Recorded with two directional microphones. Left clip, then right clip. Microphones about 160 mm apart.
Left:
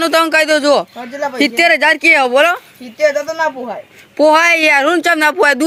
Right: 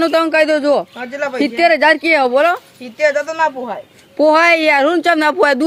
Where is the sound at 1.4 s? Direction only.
Centre (ahead or behind).